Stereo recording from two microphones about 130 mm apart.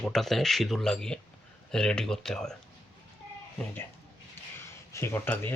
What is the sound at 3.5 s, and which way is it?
Speech, 15° left (ahead or behind).